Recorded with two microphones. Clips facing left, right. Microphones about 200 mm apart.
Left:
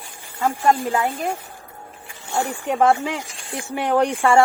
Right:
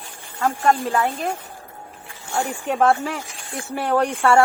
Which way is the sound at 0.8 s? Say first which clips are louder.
Even; 15° left (ahead or behind).